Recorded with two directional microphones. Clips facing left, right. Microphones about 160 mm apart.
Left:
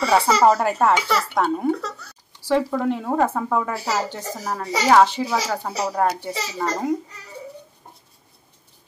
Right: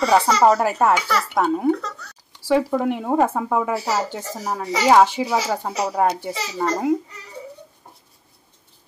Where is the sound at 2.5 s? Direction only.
15° right (ahead or behind).